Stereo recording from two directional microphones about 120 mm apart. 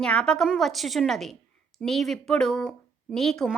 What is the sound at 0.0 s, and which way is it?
A woman's voice, 10° left (ahead or behind).